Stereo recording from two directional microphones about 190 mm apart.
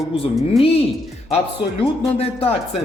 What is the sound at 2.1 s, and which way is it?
Cutlery, 30° left (ahead or behind).